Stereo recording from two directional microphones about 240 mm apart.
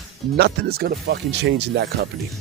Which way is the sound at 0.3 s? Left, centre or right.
Right.